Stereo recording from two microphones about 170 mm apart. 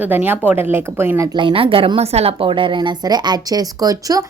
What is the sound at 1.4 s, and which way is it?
Speech, 30° right (ahead or behind).